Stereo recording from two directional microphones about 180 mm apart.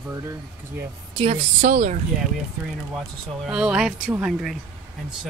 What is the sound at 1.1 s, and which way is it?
Speech, 40° right (ahead or behind).